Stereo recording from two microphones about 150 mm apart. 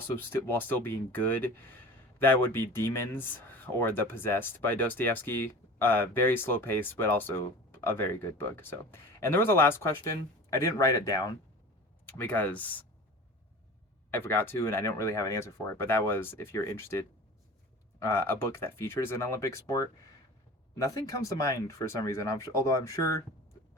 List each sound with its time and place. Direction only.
0.2 s speech: 15° left (ahead or behind)
12.0 s speech: 10° left (ahead or behind)
14.1 s speech: 15° left (ahead or behind)